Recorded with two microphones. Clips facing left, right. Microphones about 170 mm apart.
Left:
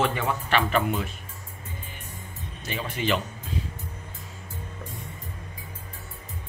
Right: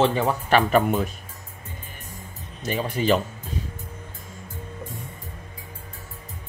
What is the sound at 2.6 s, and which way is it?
Speech, 40° right (ahead or behind).